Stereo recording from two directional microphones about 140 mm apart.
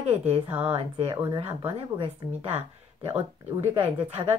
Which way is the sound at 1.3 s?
40° right (ahead or behind).